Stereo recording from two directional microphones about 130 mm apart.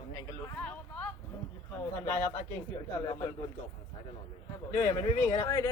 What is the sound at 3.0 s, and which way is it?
Speech, 35° left (ahead or behind).